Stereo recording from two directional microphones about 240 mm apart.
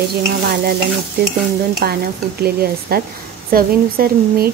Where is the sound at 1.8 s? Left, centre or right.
Right.